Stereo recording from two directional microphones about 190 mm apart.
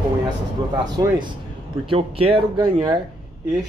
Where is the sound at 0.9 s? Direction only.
25° right (ahead or behind).